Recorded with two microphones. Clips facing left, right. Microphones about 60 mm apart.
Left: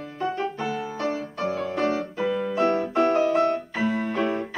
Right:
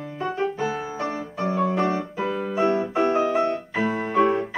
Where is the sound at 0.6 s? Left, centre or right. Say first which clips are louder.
Right 1 dB; centre.